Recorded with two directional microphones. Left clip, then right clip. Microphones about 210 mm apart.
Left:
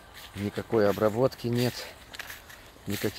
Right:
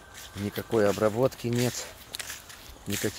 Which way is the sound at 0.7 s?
5° left (ahead or behind).